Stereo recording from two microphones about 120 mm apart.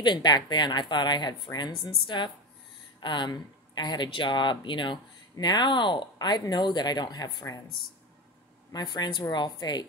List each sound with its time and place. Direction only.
0.0 s speech: 35° left (ahead or behind)
8.7 s speech: 35° left (ahead or behind)